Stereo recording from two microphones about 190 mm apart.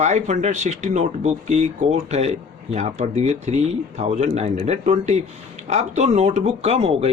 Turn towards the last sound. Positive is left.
turn(degrees=-35)  # may be behind; listen again after turning